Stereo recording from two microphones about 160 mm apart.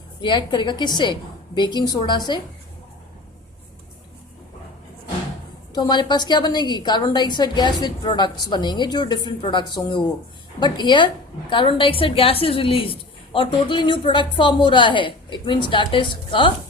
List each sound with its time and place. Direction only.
0.2 s a woman's voice: 30° left (ahead or behind)
5.7 s a woman's voice: 25° left (ahead or behind)